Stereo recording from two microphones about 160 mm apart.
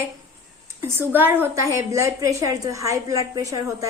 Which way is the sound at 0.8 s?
15° right (ahead or behind).